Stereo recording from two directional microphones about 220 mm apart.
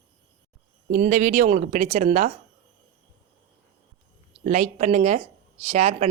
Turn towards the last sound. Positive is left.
turn(degrees=-30)  # may be behind; listen again after turning